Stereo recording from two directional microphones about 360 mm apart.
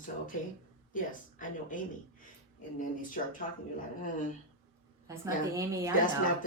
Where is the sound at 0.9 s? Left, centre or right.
Left.